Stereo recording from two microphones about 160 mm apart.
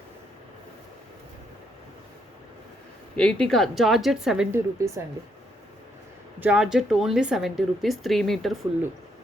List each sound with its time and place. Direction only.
3.2 s a woman's voice: 5° left (ahead or behind)
4.5 s a woman's voice: 15° right (ahead or behind)
6.4 s a woman's voice: 5° right (ahead or behind)